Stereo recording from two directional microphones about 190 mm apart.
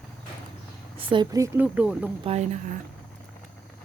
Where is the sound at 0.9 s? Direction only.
25° right (ahead or behind); by 2.0 s 5° right (ahead or behind).